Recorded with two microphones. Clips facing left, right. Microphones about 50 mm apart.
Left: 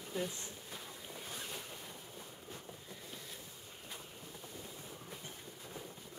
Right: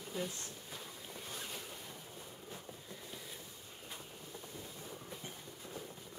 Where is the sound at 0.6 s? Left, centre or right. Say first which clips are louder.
Even; centre.